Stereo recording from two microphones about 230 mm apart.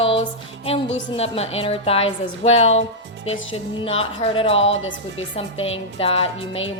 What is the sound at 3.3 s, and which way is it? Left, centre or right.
Music, left.